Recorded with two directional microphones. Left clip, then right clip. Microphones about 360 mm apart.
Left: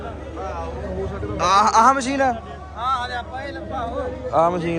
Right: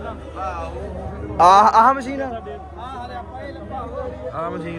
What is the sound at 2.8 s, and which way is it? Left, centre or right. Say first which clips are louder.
Vehicle: left 13 dB; left.